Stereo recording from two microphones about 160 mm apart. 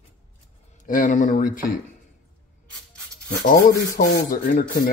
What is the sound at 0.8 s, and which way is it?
Speech, 55° left (ahead or behind).